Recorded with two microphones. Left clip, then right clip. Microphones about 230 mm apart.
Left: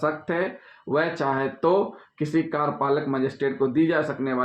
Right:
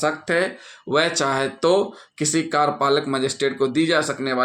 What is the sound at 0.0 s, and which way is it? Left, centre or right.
Speech, right.